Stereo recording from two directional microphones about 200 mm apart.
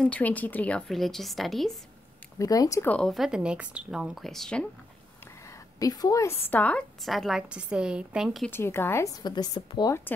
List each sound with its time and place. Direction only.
0.0 s a woman's voice: 5° left (ahead or behind)
2.3 s a woman's voice: 15° left (ahead or behind)
5.8 s a woman's voice: 20° left (ahead or behind); by 8.5 s centre (ahead or behind)
8.5 s a woman's voice: 10° left (ahead or behind)